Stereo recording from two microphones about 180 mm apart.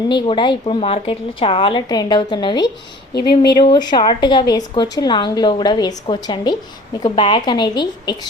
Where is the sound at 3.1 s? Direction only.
65° left (ahead or behind).